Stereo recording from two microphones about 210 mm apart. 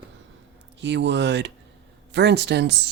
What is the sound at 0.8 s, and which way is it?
Speech, 55° right (ahead or behind).